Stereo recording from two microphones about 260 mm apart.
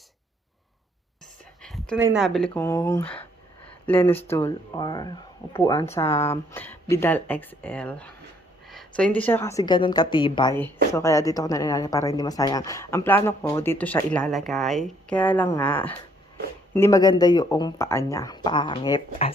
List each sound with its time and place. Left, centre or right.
1.6 s a sound: centre
2.0 s speech: centre
2.2 s a woman's voice: centre